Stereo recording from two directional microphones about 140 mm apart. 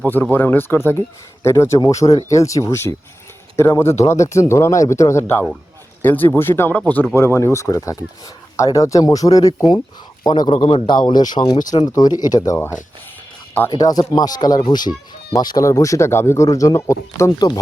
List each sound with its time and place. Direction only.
0.1 s a man's voice: 10° left (ahead or behind); by 10.5 s 30° left (ahead or behind)
10.5 s a man's voice: 40° left (ahead or behind); by 17.6 s 25° left (ahead or behind)